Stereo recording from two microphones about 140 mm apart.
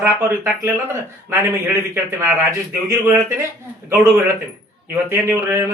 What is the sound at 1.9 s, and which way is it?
Speech, 20° right (ahead or behind).